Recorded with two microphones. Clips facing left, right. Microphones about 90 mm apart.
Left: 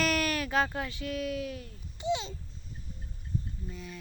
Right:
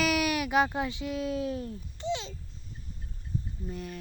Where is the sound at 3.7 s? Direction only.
55° right (ahead or behind).